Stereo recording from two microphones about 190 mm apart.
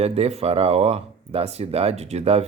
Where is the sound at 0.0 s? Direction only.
35° right (ahead or behind).